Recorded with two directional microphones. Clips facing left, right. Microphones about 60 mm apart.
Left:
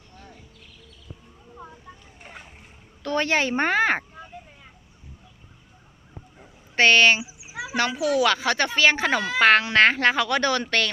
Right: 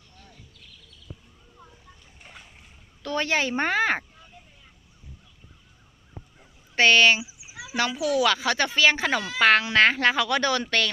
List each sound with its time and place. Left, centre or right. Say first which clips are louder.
0.2 s a sound: left 5 dB; left
2.2 s boat: left 4 dB; left
3.0 s speech: left 2 dB; centre
6.7 s speech: left 1 dB; centre
7.2 s a sound: left 5 dB; left
8.0 s speech: left 1 dB; centre